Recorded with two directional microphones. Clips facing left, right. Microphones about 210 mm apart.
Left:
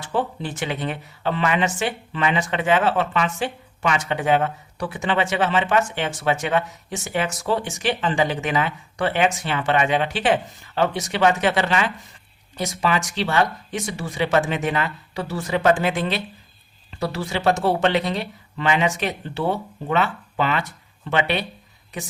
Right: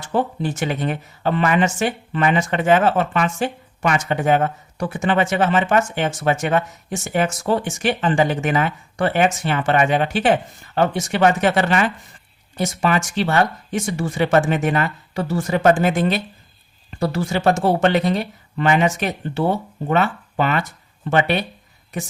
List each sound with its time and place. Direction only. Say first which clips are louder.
0.1 s speech: right 4 dB; 45° right (ahead or behind)